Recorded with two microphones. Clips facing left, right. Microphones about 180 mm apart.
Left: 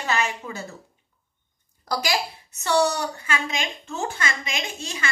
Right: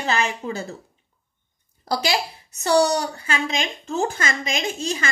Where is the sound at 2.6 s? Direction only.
35° right (ahead or behind).